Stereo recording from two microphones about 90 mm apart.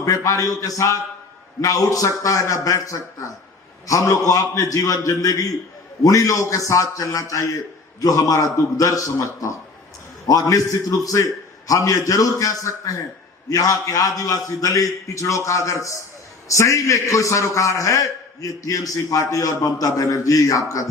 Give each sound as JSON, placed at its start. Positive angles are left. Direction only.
{"t": 0.0, "sound": "a man's voice", "side_deg": 40}